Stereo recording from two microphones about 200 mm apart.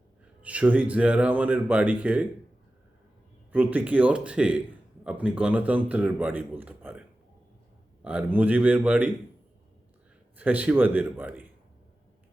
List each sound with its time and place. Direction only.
0.4 s speech: 5° right (ahead or behind)
3.5 s speech: 10° right (ahead or behind)
8.0 s speech: 5° right (ahead or behind)
10.3 s speech: 5° right (ahead or behind)